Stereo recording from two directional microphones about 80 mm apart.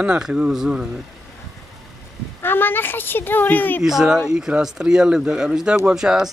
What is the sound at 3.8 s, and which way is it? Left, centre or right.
Speech, centre.